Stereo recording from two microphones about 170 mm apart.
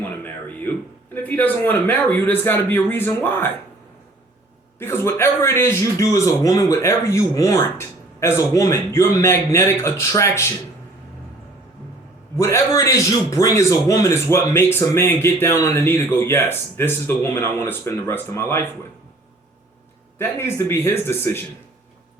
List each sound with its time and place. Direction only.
0.3 s a sound: 10° left (ahead or behind)
1.1 s a man's voice: 10° left (ahead or behind)
4.8 s a man's voice: 15° left (ahead or behind)
12.4 s a man's voice: 15° left (ahead or behind)
20.1 s a man's voice: 15° left (ahead or behind)